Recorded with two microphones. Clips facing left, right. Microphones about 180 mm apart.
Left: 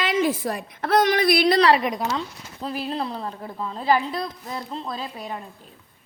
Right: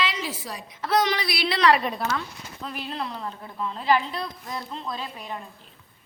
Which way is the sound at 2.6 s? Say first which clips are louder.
Left 5 dB; 35° left (ahead or behind).